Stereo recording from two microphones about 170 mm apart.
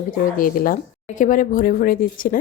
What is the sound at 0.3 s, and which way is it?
A woman's voice, 55° left (ahead or behind).